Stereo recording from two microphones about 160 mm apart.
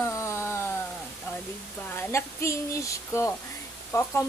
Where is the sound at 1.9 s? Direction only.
15° left (ahead or behind).